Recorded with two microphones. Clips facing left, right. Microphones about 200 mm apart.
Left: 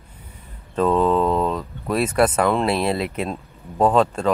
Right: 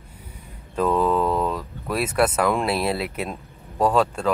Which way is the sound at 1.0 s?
25° left (ahead or behind).